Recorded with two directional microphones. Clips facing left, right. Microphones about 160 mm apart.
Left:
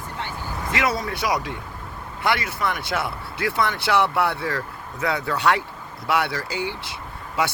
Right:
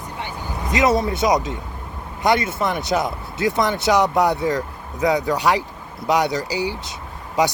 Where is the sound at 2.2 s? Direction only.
20° right (ahead or behind).